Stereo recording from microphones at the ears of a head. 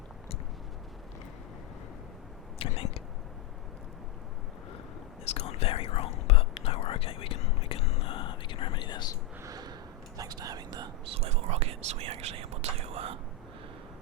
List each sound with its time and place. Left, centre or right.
2.6 s speech: left
5.2 s whispering: left
10.2 s whispering: right